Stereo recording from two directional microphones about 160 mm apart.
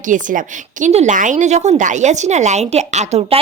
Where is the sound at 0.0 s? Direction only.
55° right (ahead or behind).